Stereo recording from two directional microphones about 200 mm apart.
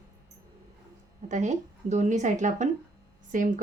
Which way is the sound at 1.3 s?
35° right (ahead or behind).